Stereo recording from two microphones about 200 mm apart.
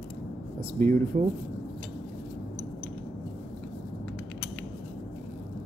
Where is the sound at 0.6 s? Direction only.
45° right (ahead or behind).